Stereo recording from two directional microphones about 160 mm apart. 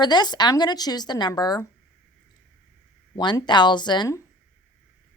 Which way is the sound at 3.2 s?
30° left (ahead or behind).